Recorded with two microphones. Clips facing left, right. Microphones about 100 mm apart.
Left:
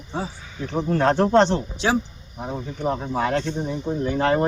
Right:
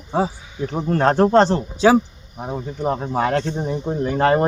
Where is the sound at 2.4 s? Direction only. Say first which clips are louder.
Right 2 dB; 15° right (ahead or behind).